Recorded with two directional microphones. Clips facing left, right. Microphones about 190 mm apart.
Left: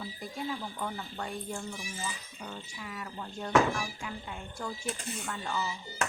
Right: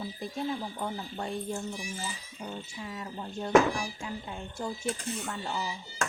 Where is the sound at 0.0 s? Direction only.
25° right (ahead or behind).